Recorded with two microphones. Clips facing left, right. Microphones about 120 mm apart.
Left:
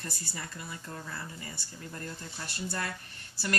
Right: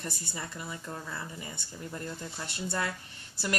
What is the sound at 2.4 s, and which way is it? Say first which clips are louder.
Speech: right 1 dB; 25° right (ahead or behind).